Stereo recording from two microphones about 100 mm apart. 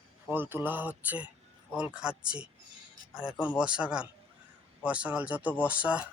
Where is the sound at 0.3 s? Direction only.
20° right (ahead or behind).